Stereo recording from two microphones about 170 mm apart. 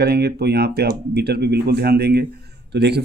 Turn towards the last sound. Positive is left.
turn(degrees=-80)